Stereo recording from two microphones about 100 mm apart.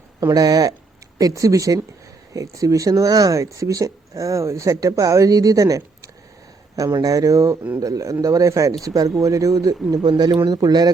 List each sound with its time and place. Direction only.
0.2 s speech: 40° right (ahead or behind)